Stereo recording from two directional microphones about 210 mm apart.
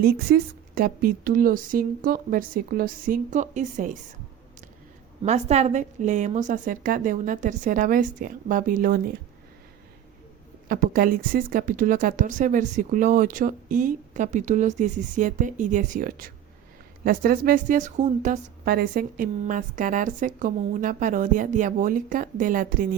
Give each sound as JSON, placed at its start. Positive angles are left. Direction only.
{"t": 0.0, "sound": "a woman's voice", "side_deg": -45}
{"t": 5.2, "sound": "a woman's voice", "side_deg": -30}
{"t": 10.7, "sound": "a woman's voice", "side_deg": -40}